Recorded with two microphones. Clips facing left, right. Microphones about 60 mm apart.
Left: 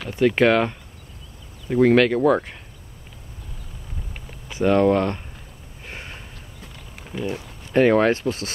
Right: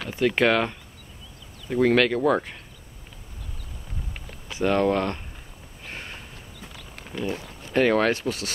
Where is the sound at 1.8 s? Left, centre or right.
Left.